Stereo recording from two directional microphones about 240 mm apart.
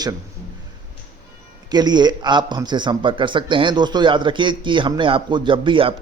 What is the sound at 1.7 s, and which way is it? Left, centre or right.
Speech, centre.